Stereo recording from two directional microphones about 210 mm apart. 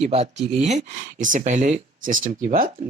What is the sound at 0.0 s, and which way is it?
Speech, 30° right (ahead or behind).